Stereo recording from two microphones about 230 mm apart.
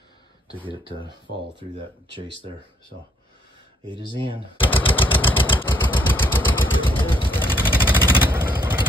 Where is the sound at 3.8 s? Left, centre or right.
Centre.